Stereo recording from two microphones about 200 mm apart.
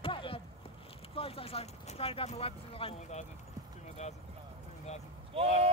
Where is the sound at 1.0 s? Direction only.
30° left (ahead or behind).